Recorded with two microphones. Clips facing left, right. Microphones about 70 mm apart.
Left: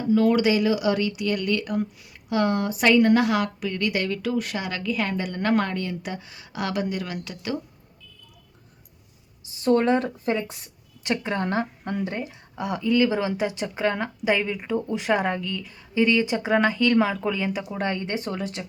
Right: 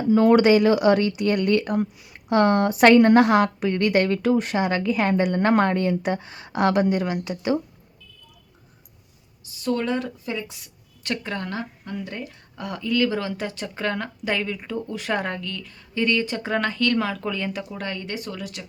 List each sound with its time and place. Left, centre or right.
0.1 s speech: right
3.1 s speech: right
9.4 s a woman's voice: left
11.0 s speech: left
17.7 s speech: left